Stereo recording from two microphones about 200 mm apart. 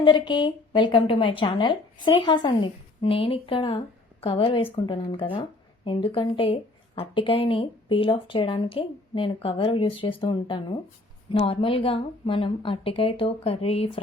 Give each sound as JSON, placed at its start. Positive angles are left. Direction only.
{"t": 0.0, "sound": "a woman's voice", "side_deg": 25}